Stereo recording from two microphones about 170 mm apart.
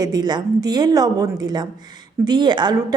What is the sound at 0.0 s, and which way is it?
Speech, 25° right (ahead or behind).